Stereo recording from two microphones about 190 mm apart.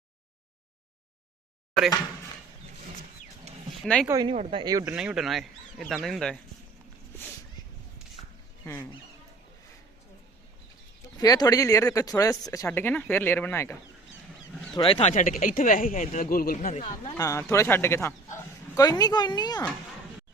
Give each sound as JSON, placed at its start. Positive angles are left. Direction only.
{"t": 3.5, "sound": "a sound", "side_deg": -35}
{"t": 4.0, "sound": "speech", "side_deg": -15}
{"t": 4.3, "sound": "speech", "side_deg": -25}
{"t": 4.9, "sound": "speech", "side_deg": -5}
{"t": 8.2, "sound": "dog", "side_deg": 30}
{"t": 8.7, "sound": "speech", "side_deg": 20}
{"t": 11.2, "sound": "speech", "side_deg": 20}
{"t": 14.8, "sound": "speech", "side_deg": 30}
{"t": 15.1, "sound": "speech", "side_deg": 45}
{"t": 17.2, "sound": "speech", "side_deg": 15}